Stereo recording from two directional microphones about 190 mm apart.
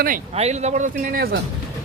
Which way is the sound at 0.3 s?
35° right (ahead or behind).